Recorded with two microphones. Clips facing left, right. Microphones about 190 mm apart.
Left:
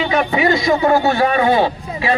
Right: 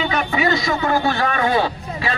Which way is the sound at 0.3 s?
25° left (ahead or behind).